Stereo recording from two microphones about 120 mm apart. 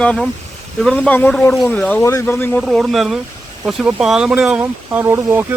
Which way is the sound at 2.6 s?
Centre (ahead or behind).